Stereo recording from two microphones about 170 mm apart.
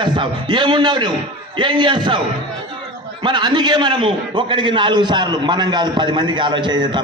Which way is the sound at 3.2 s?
25° right (ahead or behind).